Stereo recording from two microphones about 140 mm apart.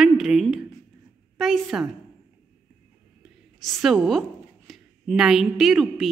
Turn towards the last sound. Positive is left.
turn(degrees=0)  # may be behind; listen again after turning